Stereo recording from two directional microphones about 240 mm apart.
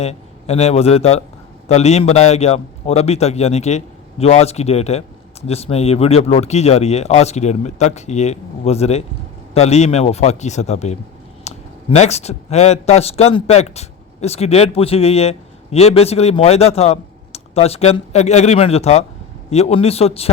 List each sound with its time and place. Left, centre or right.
0.0 s a man's voice: left